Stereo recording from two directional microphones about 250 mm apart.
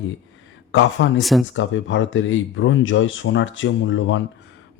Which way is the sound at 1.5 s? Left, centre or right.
Left.